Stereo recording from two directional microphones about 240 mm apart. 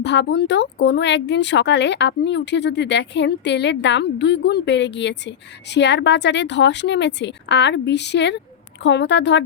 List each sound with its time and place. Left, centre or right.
0.0 s speech: left